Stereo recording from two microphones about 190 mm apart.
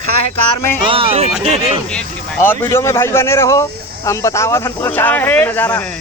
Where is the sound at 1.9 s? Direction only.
10° left (ahead or behind).